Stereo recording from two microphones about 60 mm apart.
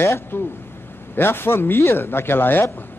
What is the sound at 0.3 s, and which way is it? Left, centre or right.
Speech, left.